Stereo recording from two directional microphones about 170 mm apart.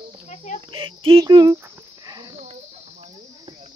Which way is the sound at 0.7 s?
30° right (ahead or behind).